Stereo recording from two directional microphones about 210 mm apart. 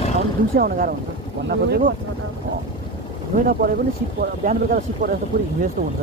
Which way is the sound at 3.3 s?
45° right (ahead or behind).